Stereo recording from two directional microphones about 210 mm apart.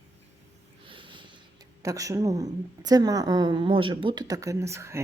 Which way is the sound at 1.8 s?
15° right (ahead or behind).